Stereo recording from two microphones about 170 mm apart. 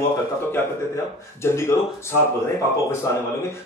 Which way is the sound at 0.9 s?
15° left (ahead or behind).